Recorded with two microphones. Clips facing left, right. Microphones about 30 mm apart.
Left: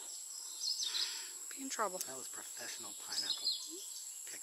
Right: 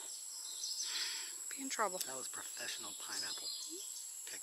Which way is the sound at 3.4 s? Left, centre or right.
Left.